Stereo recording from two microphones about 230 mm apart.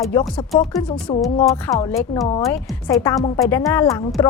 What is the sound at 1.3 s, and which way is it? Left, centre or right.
A woman's voice, centre.